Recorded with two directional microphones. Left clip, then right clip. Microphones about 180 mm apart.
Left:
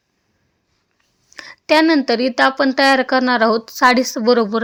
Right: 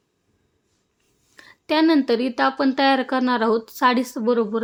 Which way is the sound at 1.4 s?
25° left (ahead or behind).